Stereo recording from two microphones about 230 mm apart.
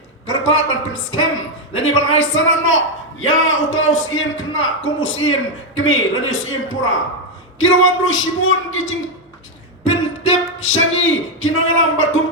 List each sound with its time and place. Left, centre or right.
0.3 s a man's voice: left
9.8 s speech: left